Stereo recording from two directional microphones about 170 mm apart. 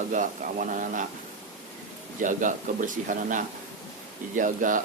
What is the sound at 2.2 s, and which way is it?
Speech, 50° right (ahead or behind).